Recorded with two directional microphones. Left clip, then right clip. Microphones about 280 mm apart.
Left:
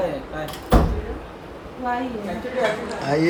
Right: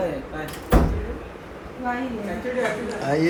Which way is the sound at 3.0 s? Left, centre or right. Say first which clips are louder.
Left 1 dB; centre.